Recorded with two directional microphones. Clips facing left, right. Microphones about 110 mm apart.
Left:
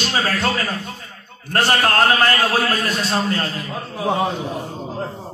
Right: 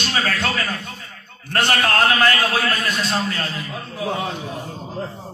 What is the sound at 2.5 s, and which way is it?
Speech, 35° left (ahead or behind).